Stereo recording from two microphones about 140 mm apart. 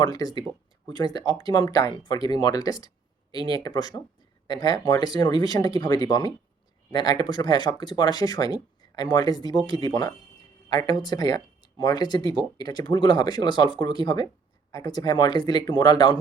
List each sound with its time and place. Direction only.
0.0 s speech: 25° left (ahead or behind)
12.2 s speech: 35° right (ahead or behind)
12.5 s speech: 30° left (ahead or behind)